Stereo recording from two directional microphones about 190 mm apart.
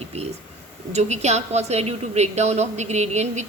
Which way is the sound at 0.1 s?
35° right (ahead or behind).